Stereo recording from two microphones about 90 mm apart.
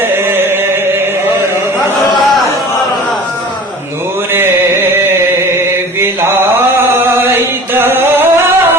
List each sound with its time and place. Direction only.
0.3 s a sound: 25° right (ahead or behind)
5.5 s chant: 30° right (ahead or behind)
7.7 s singing: 30° right (ahead or behind)